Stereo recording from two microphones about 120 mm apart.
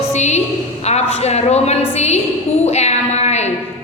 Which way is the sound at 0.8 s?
65° left (ahead or behind).